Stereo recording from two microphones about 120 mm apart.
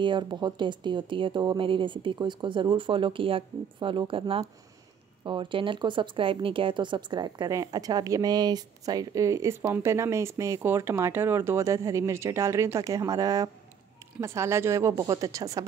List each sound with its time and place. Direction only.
0.0 s speech: 40° right (ahead or behind)